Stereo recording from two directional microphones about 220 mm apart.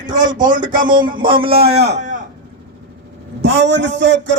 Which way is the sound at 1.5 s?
45° right (ahead or behind).